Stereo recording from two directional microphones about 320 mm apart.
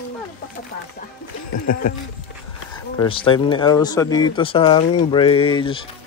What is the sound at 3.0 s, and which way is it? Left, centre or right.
Speech, centre.